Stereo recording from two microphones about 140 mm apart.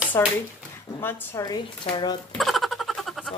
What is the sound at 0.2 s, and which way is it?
Speech, 20° left (ahead or behind).